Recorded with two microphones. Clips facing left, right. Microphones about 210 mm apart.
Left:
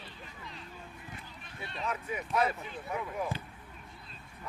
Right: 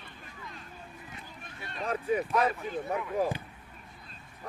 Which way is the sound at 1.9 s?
35° right (ahead or behind).